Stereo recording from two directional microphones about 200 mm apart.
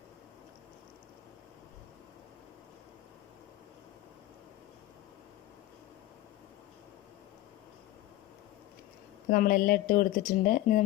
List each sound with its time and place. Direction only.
9.3 s speech: 45° left (ahead or behind)